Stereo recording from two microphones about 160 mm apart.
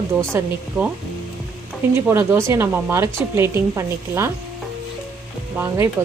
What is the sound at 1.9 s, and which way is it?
A woman's voice, 15° right (ahead or behind).